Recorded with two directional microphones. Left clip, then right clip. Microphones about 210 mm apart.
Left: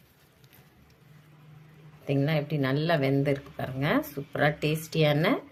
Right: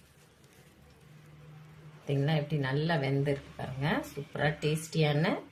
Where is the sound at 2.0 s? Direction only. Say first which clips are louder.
Left 4 dB; 30° left (ahead or behind).